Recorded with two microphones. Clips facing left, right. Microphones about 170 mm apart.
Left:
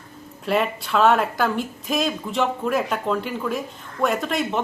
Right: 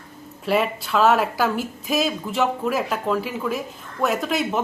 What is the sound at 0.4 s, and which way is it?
Speech, centre (ahead or behind).